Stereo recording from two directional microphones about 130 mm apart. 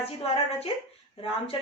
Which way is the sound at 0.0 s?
50° left (ahead or behind).